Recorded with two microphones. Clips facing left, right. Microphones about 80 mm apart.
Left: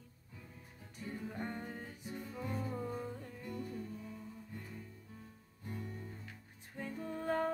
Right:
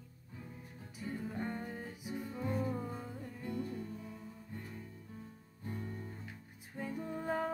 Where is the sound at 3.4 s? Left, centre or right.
Right.